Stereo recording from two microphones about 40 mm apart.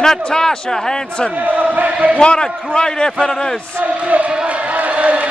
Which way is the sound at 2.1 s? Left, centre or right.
Centre.